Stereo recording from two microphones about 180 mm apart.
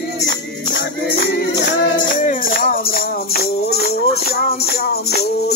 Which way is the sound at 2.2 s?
50° left (ahead or behind).